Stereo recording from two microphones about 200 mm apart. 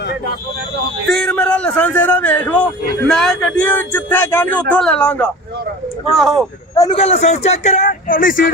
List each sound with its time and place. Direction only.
1.0 s a man's voice: 5° left (ahead or behind)
6.9 s speech: 30° left (ahead or behind)